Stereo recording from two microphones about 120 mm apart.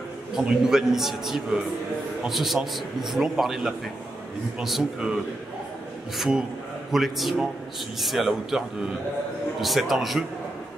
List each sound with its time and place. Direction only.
0.3 s a man's voice: 5° right (ahead or behind)
6.1 s a man's voice: centre (ahead or behind)